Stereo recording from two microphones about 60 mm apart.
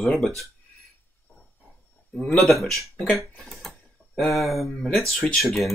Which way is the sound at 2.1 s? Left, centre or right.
Centre.